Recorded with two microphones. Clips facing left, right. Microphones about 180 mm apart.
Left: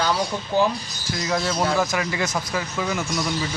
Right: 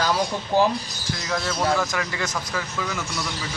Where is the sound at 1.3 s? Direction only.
15° left (ahead or behind).